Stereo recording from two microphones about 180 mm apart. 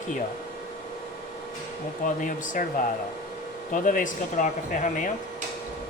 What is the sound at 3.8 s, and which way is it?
Speech, 45° left (ahead or behind).